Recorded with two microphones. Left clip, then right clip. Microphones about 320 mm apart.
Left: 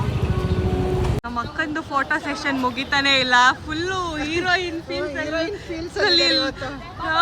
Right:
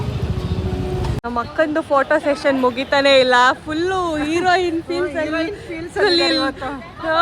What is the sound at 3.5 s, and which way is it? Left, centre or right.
A woman's voice, centre.